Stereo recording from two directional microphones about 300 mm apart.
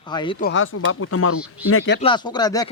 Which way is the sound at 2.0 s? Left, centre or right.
Centre.